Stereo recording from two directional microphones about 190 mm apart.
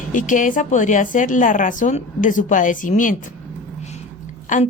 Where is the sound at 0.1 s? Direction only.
45° left (ahead or behind).